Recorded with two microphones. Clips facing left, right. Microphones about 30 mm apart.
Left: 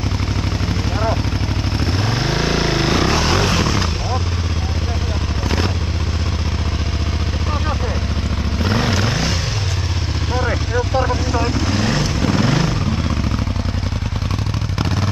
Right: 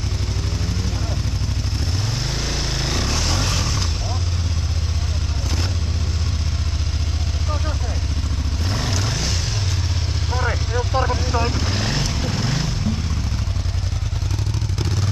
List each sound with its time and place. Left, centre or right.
1.8 s vehicle: left
8.6 s vehicle: left
10.3 s vehicle: centre